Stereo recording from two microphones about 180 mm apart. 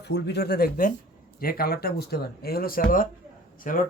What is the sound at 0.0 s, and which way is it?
Speech, 70° left (ahead or behind).